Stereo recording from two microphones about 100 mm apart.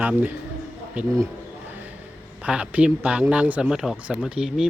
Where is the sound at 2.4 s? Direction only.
10° right (ahead or behind).